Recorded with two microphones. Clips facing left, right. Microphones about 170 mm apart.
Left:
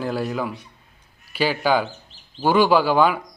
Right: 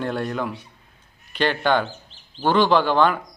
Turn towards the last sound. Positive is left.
turn(degrees=5)  # may be behind; listen again after turning